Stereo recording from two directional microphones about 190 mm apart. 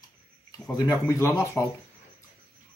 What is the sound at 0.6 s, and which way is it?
Speech, 20° left (ahead or behind).